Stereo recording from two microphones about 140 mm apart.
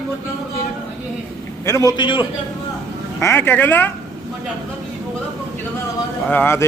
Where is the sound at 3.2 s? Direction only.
15° left (ahead or behind).